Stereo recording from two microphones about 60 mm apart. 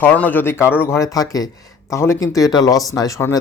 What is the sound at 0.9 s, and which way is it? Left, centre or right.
Speech, left.